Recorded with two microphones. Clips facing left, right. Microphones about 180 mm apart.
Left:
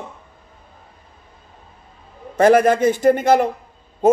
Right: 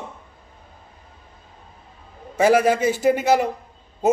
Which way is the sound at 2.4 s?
10° right (ahead or behind).